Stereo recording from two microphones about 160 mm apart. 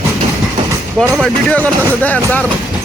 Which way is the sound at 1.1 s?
5° left (ahead or behind).